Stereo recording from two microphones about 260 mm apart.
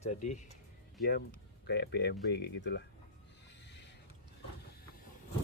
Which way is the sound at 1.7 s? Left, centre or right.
Left.